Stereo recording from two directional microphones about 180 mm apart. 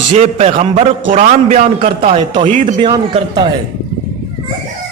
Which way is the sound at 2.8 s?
25° right (ahead or behind).